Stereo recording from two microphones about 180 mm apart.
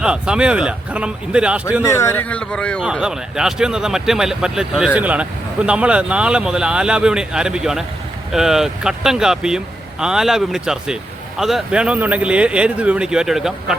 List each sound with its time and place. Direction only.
0.0 s a man's voice: 5° right (ahead or behind)
1.8 s a man's voice: 15° left (ahead or behind); by 13.7 s centre (ahead or behind)